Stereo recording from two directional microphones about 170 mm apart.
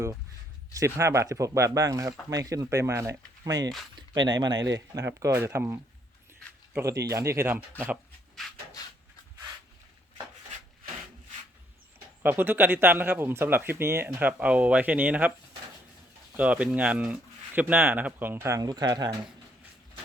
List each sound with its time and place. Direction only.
0.7 s speech: 15° right (ahead or behind)
4.7 s speech: 20° right (ahead or behind)
8.4 s a sound: centre (ahead or behind)
12.2 s speech: 10° right (ahead or behind)
16.4 s speech: 5° right (ahead or behind); by 19.1 s 25° right (ahead or behind)